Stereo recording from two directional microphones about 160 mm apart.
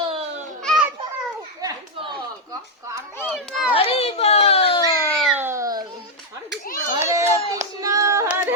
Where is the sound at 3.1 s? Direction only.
5° left (ahead or behind).